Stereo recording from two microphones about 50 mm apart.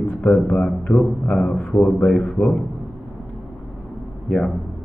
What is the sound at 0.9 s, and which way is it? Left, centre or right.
Speech, left.